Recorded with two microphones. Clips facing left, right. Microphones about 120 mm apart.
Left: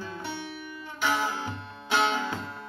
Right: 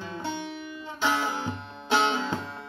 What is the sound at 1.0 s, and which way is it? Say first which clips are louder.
Music: right 1 dB; 20° right (ahead or behind).